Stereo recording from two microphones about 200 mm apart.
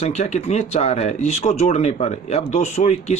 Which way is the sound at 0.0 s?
35° left (ahead or behind).